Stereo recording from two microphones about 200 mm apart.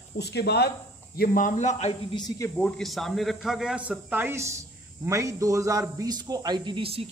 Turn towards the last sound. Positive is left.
turn(degrees=-25)  # may be behind; listen again after turning